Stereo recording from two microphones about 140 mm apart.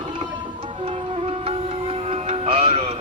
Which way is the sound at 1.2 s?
45° right (ahead or behind).